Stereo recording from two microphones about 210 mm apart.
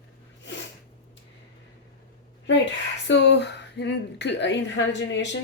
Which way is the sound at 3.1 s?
55° left (ahead or behind).